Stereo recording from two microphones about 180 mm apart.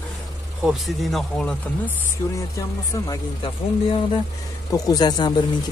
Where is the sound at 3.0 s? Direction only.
30° left (ahead or behind).